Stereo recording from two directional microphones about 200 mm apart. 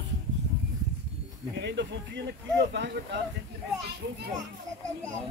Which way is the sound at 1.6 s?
60° right (ahead or behind).